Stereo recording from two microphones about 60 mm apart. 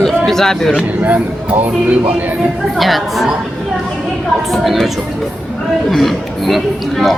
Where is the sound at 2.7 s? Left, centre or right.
Centre.